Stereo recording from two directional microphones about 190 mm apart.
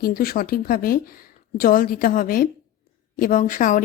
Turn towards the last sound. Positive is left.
turn(degrees=45)  # may be behind; listen again after turning